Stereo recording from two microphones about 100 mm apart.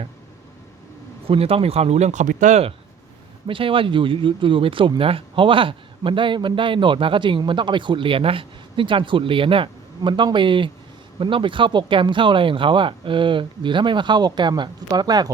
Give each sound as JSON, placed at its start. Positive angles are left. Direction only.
{"t": 1.3, "sound": "speech", "side_deg": -70}
{"t": 3.4, "sound": "speech", "side_deg": -60}